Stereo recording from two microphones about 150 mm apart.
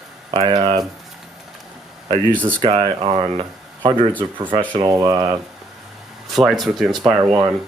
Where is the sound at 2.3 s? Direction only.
10° left (ahead or behind).